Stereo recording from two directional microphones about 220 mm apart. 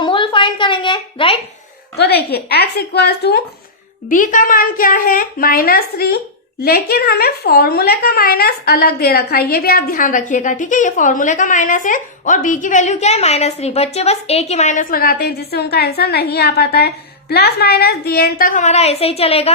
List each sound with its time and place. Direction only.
0.0 s a sound: 25° left (ahead or behind)
2.0 s a woman's voice: 45° left (ahead or behind)
4.1 s speech: 35° left (ahead or behind)